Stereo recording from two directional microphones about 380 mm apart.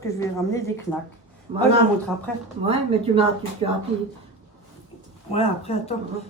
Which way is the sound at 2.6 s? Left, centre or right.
Centre.